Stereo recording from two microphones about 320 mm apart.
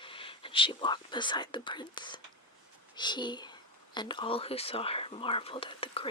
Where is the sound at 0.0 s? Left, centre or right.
Centre.